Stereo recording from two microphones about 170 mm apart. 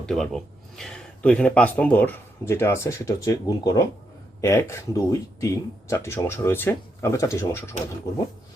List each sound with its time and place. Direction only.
0.0 s speech: 5° left (ahead or behind)